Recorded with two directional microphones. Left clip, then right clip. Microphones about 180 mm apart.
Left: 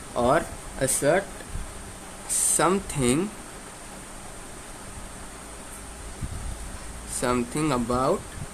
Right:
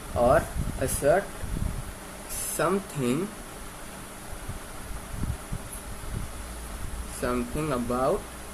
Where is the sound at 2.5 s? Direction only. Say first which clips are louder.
Left 3 dB; 65° left (ahead or behind).